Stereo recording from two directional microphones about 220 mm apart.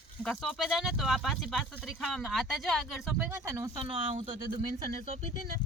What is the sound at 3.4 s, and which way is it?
Speech, 15° right (ahead or behind).